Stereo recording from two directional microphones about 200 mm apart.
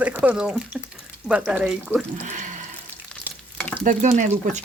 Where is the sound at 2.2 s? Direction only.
40° right (ahead or behind).